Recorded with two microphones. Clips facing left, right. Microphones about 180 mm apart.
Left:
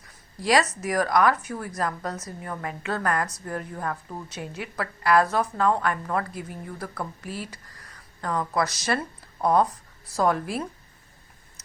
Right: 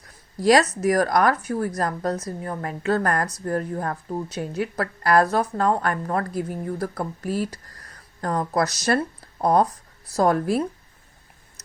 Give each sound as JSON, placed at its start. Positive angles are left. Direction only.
{"t": 0.4, "sound": "a woman's voice", "side_deg": -40}